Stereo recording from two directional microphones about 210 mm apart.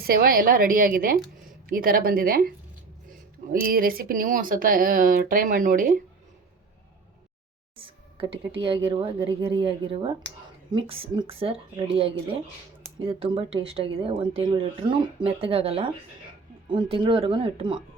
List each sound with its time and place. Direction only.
0.0 s a woman's voice: 45° right (ahead or behind)
7.8 s a woman's voice: 25° right (ahead or behind)